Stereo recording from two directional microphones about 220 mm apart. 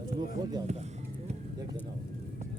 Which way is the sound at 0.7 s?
30° right (ahead or behind).